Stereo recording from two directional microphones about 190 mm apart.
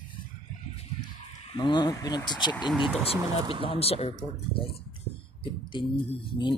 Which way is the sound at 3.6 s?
30° left (ahead or behind).